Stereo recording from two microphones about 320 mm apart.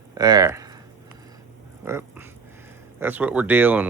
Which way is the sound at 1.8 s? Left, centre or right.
Centre.